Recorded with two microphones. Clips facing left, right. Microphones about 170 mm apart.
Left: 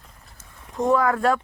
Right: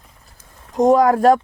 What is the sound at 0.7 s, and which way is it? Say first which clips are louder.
Speech: right 7 dB; 40° right (ahead or behind).